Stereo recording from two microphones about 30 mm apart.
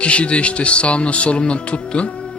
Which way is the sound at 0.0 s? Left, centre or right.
Left.